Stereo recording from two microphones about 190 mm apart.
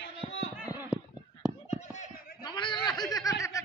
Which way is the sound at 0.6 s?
10° right (ahead or behind).